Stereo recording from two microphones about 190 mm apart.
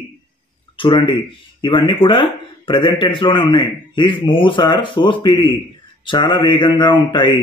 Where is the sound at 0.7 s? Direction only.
25° left (ahead or behind).